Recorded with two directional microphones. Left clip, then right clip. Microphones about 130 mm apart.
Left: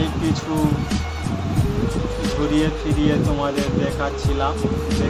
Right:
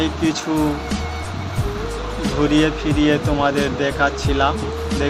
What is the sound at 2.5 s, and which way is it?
Speech, 15° right (ahead or behind).